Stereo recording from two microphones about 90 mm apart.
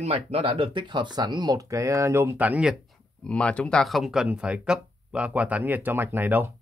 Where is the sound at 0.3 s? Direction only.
90° right; by 2.7 s 15° right (ahead or behind).